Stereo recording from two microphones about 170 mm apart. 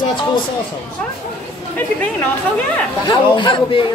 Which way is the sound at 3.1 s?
30° left (ahead or behind).